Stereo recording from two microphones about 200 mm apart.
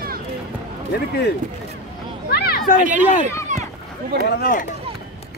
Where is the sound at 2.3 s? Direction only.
50° left (ahead or behind).